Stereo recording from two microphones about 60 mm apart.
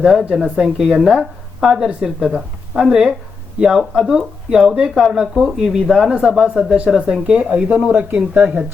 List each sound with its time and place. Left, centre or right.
0.0 s speech: centre
7.9 s speech: right